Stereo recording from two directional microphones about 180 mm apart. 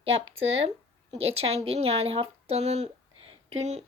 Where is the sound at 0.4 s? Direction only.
35° right (ahead or behind).